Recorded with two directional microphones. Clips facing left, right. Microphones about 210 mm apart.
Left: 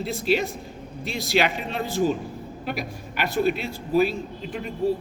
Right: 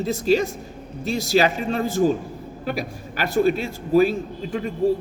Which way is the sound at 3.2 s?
45° right (ahead or behind).